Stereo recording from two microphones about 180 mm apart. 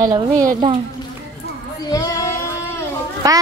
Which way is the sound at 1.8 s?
20° left (ahead or behind).